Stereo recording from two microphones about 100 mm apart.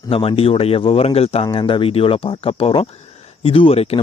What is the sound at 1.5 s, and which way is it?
A man's voice, 60° left (ahead or behind).